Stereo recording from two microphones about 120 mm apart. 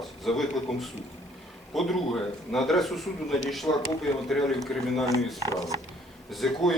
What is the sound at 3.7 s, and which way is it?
Speech, 35° left (ahead or behind).